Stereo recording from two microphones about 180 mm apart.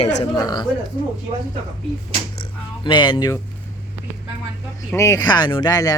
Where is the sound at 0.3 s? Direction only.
25° left (ahead or behind).